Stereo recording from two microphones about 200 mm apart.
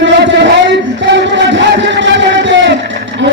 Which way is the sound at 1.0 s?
65° right (ahead or behind).